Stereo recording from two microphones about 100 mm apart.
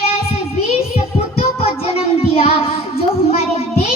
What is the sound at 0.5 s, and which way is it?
Child singing, 90° left.